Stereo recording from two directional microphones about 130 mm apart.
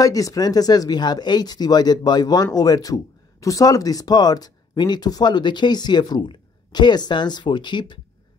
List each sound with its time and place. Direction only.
0.0 s speech: 25° left (ahead or behind)